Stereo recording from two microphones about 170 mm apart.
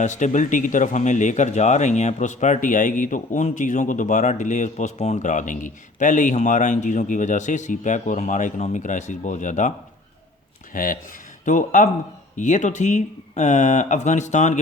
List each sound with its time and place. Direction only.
0.0 s speech: 45° left (ahead or behind)
10.7 s speech: 55° left (ahead or behind)